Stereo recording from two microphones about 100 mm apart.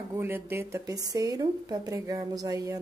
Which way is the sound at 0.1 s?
25° right (ahead or behind).